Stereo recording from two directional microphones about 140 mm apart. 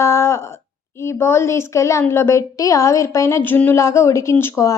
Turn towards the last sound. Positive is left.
turn(degrees=20)  # may be behind; listen again after turning